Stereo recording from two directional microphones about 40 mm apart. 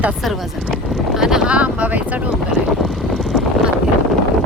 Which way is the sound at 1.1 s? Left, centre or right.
Centre.